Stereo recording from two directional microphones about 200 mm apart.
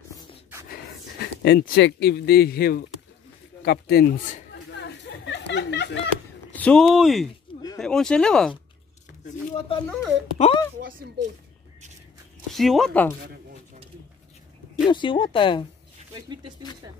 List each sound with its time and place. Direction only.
0.7 s a sound: 50° left (ahead or behind)
1.4 s speech: 50° left (ahead or behind)
3.6 s chatter: 55° left (ahead or behind)
6.5 s speech: 5° left (ahead or behind)
9.2 s speech: 30° left (ahead or behind)
10.8 s speech: 45° right (ahead or behind)
12.4 s speech: centre (ahead or behind)
14.9 s speech: 25° left (ahead or behind)